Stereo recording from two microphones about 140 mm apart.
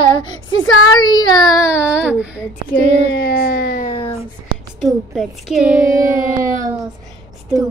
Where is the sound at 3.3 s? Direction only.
90° left.